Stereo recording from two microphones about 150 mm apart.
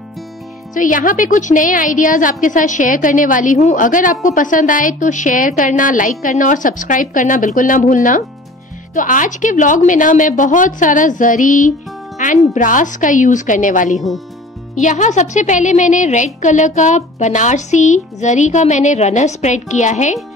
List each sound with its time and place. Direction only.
0.7 s a woman's voice: 60° left (ahead or behind)
13.9 s speech: centre (ahead or behind)
14.8 s a child's voice: 55° left (ahead or behind)